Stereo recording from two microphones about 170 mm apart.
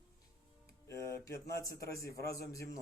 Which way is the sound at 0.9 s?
15° left (ahead or behind).